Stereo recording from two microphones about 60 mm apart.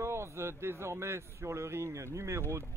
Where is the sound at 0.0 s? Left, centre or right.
Right.